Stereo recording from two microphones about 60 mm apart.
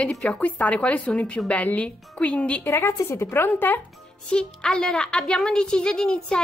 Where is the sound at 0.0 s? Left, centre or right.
Centre.